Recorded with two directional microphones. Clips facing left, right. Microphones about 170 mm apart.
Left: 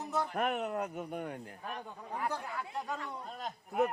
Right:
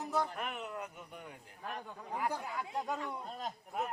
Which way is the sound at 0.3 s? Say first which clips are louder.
Left 8 dB; 50° left (ahead or behind).